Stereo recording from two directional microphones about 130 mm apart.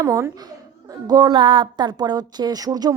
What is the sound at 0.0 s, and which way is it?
A woman's voice, 25° right (ahead or behind).